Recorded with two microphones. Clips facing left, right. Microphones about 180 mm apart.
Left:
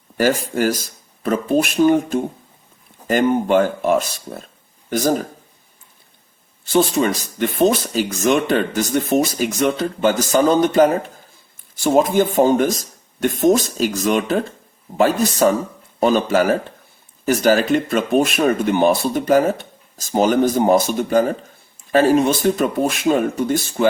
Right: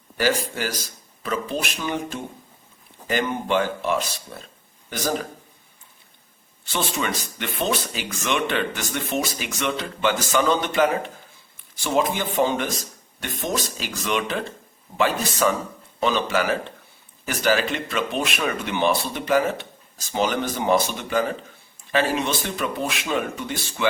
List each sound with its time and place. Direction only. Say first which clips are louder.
0.2 s speech: left 6 dB; 50° left (ahead or behind)
6.7 s speech: left 10 dB; 40° left (ahead or behind)